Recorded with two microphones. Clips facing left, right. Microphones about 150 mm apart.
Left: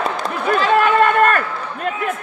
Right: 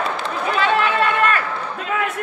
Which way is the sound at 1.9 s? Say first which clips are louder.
Even; 55° left (ahead or behind).